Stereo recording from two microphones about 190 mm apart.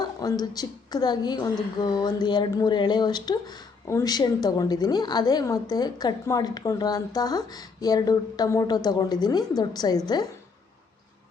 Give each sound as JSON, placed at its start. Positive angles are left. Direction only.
{"t": 0.0, "sound": "speech", "side_deg": 20}